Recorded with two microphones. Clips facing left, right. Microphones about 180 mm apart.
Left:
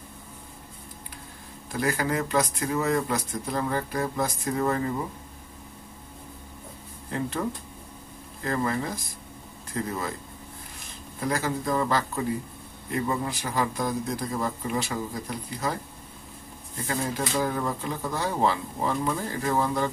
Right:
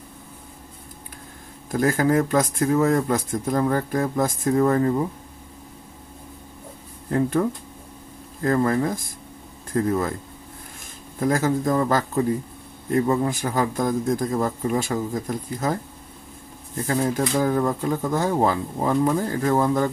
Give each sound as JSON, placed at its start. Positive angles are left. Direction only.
{"t": 1.7, "sound": "speech", "side_deg": -45}
{"t": 7.1, "sound": "speech", "side_deg": -50}
{"t": 11.1, "sound": "speech", "side_deg": -45}